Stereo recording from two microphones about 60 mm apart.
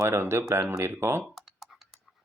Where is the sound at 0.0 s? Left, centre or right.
Right.